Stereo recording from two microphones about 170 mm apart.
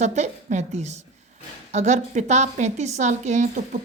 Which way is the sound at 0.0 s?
45° right (ahead or behind).